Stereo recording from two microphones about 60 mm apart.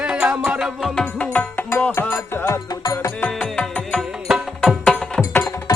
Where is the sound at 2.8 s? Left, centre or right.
Left.